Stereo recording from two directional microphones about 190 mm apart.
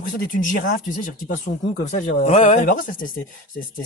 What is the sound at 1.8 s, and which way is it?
A man's voice, 35° left (ahead or behind).